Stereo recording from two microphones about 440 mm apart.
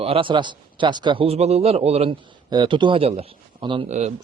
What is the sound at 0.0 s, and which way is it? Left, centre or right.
A man's voice, centre.